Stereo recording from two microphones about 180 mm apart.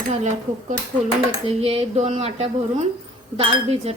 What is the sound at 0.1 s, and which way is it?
Speech, 40° right (ahead or behind).